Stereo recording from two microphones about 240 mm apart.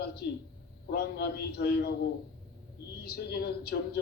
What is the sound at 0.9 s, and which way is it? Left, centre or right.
A man's voice, left.